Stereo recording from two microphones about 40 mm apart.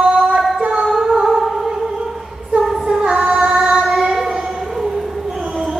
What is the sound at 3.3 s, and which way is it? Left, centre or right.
Music, centre.